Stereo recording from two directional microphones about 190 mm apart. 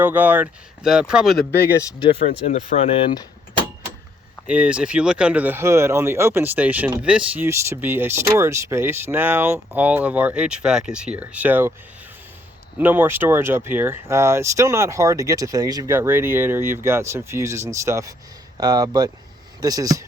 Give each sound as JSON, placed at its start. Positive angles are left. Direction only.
{"t": 0.0, "sound": "speech", "side_deg": -10}
{"t": 1.5, "sound": "speech", "side_deg": 10}
{"t": 2.0, "sound": "speech", "side_deg": 30}
{"t": 4.4, "sound": "speech", "side_deg": -5}
{"t": 12.8, "sound": "speech", "side_deg": -10}